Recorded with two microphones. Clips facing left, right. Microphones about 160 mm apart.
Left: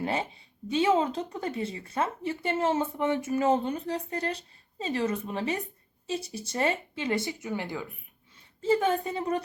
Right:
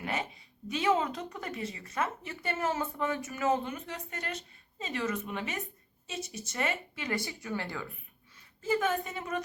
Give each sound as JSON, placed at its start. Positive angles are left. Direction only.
{"t": 0.0, "sound": "speech", "side_deg": 30}
{"t": 8.6, "sound": "a woman's voice", "side_deg": 30}